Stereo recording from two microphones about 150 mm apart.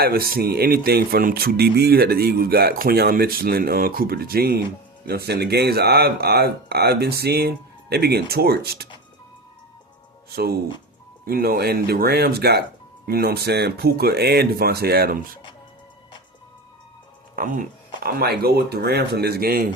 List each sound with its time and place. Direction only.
0.0 s speech: 80° right
10.3 s speech: 90° right
17.3 s speech: 70° right (ahead or behind)